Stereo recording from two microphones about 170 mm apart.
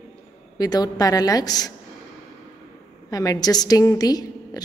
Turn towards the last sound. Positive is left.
turn(degrees=20)  # may be behind; listen again after turning